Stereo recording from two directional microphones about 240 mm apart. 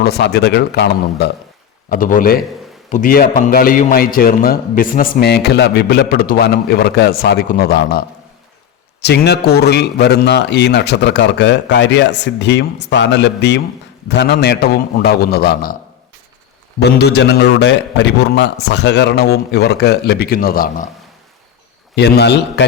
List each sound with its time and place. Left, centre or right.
0.0 s a man's voice: left
16.8 s a man's voice: left
21.9 s a man's voice: left